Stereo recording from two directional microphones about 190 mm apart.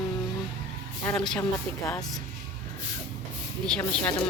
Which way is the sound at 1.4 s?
15° left (ahead or behind).